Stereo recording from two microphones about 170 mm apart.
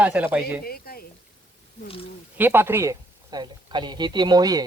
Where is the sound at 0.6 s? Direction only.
60° left (ahead or behind).